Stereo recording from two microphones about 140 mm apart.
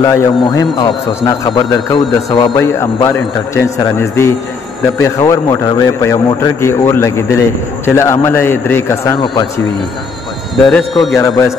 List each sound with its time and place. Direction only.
0.0 s a man's voice: 20° left (ahead or behind)
2.6 s a man's voice: 20° left (ahead or behind)
9.2 s speech: 30° left (ahead or behind)
10.7 s a man's voice: centre (ahead or behind)
11.1 s a man's voice: 25° left (ahead or behind)